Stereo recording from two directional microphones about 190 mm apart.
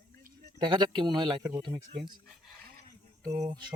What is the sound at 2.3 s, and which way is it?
Dog, centre (ahead or behind).